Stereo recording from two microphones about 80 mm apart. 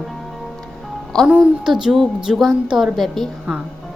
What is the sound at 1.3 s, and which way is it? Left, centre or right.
Speech, centre.